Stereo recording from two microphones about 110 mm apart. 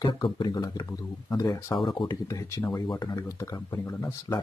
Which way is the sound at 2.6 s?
35° left (ahead or behind).